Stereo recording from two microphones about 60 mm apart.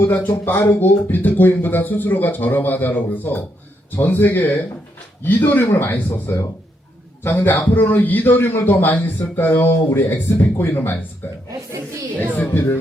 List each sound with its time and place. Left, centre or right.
0.0 s speech: left
12.3 s speech: left